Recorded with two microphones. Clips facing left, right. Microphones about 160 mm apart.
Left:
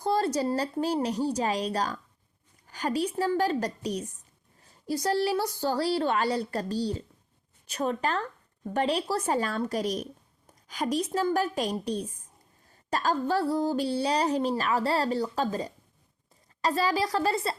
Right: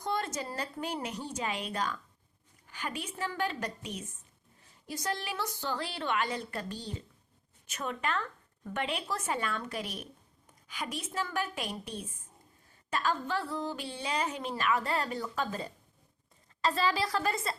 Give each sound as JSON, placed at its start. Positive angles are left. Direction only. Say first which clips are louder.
{"t": 0.0, "sound": "speech", "louder": "left 8 dB", "side_deg": 35}